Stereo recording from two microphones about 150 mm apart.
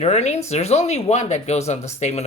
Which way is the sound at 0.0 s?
45° left (ahead or behind).